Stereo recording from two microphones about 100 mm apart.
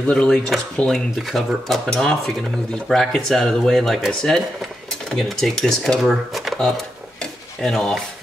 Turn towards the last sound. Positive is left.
turn(degrees=5)  # may be behind; listen again after turning